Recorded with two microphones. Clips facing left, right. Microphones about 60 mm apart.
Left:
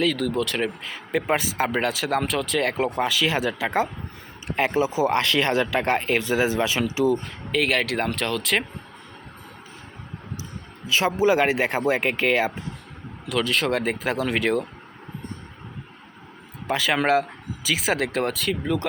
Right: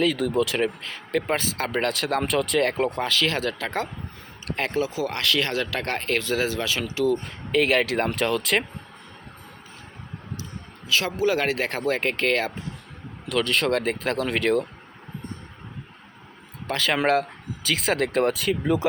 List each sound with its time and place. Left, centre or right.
0.0 s speech: centre
7.2 s speech: centre
10.8 s speech: left; by 14.7 s centre
16.6 s speech: centre